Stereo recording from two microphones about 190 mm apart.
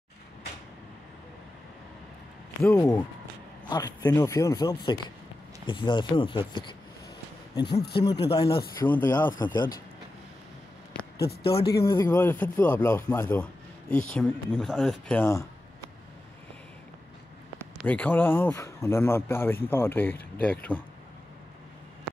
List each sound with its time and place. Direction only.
2.6 s speech: 15° left (ahead or behind)
8.8 s speech: 10° left (ahead or behind)
9.4 s speech: 20° left (ahead or behind)
11.8 s speech: 20° left (ahead or behind)
17.8 s speech: 10° left (ahead or behind)